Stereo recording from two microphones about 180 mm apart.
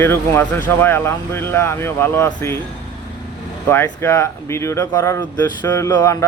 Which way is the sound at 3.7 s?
15° left (ahead or behind).